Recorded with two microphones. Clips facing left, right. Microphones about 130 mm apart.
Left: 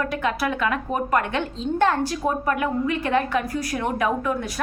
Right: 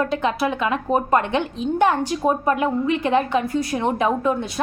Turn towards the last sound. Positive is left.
turn(degrees=-25)  # may be behind; listen again after turning